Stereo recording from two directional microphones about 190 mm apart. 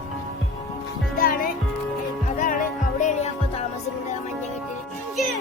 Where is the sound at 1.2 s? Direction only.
50° left (ahead or behind).